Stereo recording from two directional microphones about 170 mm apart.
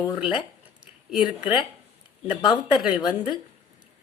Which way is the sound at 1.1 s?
5° right (ahead or behind).